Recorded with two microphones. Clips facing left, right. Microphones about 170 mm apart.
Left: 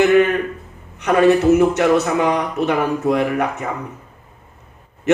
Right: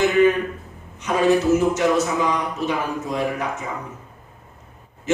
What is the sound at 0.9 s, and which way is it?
A man's voice, 65° left (ahead or behind).